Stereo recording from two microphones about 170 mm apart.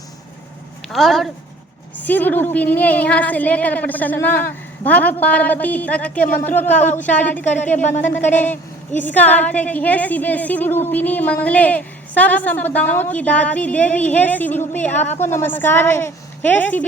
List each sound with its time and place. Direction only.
0.9 s a woman's voice: centre (ahead or behind)
7.8 s speech: 45° left (ahead or behind)
8.3 s a woman's voice: 10° left (ahead or behind)